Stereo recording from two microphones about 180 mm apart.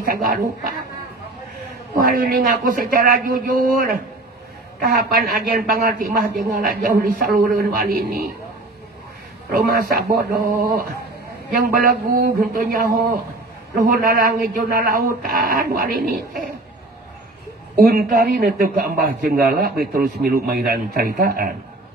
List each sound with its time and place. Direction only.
0.0 s speech: 55° right (ahead or behind)
2.0 s a man's voice: 55° right (ahead or behind)
9.5 s a man's voice: 55° right (ahead or behind)
17.7 s a man's voice: 50° right (ahead or behind)